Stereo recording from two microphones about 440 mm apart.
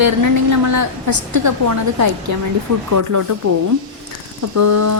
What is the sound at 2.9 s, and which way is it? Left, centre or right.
Speech, right.